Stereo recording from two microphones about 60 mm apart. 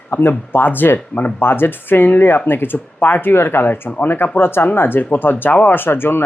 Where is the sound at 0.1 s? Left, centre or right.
Left.